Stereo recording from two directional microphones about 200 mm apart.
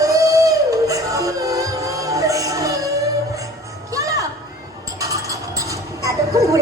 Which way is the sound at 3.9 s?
15° right (ahead or behind).